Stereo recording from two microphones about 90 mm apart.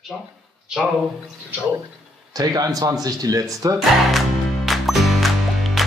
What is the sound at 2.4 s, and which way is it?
A man's voice, 45° right (ahead or behind).